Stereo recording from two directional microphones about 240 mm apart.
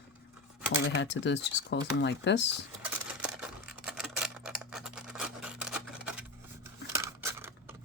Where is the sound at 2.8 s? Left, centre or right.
Centre.